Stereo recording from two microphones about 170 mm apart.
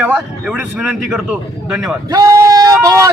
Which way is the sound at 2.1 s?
20° right (ahead or behind).